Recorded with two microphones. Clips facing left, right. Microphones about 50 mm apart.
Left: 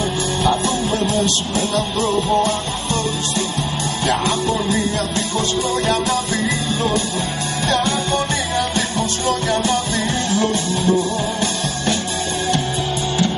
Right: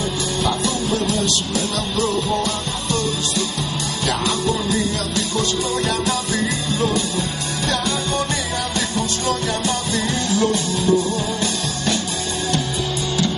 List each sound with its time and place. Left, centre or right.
0.4 s music: left
9.5 s music: left